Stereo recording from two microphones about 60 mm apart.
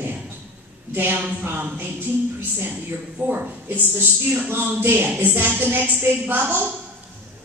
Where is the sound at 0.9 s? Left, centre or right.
Right.